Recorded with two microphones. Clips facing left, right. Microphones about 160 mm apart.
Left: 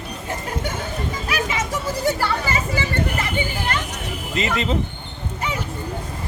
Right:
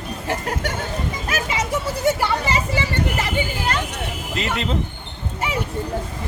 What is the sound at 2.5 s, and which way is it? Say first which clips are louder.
Children playing: right 1 dB; 30° right (ahead or behind).